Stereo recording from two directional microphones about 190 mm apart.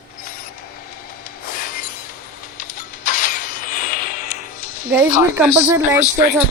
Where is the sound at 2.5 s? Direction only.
45° left (ahead or behind).